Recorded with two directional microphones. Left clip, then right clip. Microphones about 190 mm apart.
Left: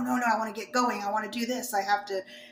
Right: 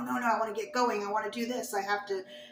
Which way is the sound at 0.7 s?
50° left (ahead or behind).